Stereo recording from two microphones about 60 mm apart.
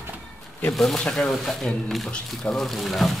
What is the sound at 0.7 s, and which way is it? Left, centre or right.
Speech, centre.